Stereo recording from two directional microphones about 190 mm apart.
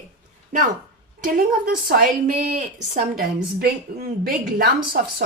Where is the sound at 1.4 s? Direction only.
50° right (ahead or behind).